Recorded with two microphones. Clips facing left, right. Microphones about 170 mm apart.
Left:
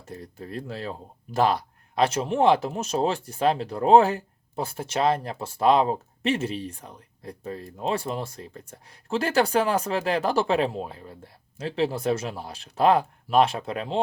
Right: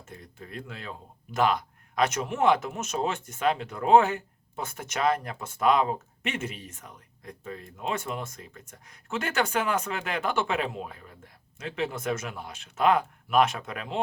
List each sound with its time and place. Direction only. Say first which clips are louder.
0.0 s speech: left 6 dB; 35° left (ahead or behind)